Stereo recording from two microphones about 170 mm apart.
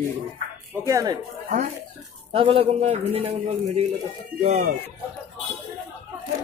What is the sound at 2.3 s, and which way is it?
Speech, 35° right (ahead or behind).